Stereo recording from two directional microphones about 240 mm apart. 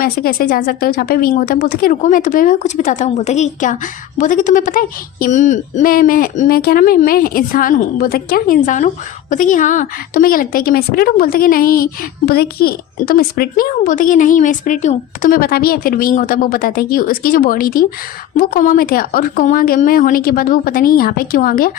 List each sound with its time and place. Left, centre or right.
0.0 s speech: left